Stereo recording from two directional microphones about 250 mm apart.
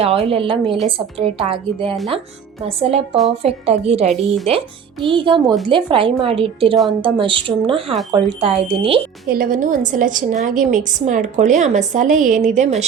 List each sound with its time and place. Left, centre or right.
0.0 s a woman's voice: right
9.3 s a woman's voice: right